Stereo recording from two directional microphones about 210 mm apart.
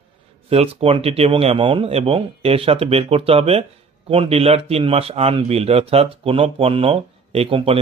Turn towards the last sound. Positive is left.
turn(degrees=-25)  # may be behind; listen again after turning